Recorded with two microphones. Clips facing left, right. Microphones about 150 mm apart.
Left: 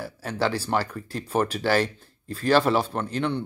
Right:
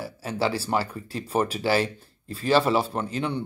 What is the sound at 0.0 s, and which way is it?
Speech, 5° right (ahead or behind).